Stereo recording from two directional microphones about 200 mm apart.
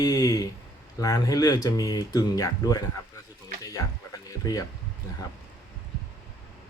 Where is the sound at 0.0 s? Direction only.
15° left (ahead or behind).